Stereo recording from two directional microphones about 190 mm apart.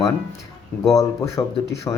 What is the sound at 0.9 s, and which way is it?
Speech, 15° left (ahead or behind).